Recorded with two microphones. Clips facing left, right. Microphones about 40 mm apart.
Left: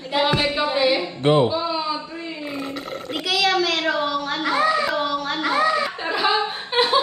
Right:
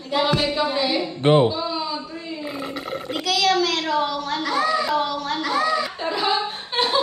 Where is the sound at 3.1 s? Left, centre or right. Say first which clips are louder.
Even; centre.